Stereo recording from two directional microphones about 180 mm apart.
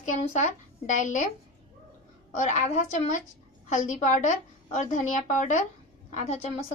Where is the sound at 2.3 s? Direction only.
40° left (ahead or behind).